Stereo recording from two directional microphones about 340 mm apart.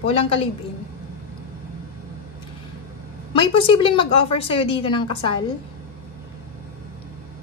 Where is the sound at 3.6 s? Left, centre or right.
Centre.